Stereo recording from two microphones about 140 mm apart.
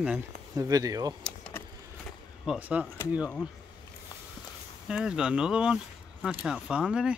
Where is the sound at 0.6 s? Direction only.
25° right (ahead or behind).